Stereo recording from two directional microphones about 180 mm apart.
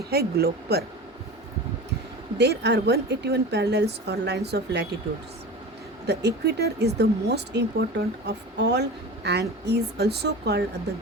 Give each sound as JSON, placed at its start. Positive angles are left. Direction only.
{"t": 0.0, "sound": "speech", "side_deg": -60}
{"t": 2.4, "sound": "a woman's voice", "side_deg": -65}
{"t": 6.1, "sound": "a woman's voice", "side_deg": -65}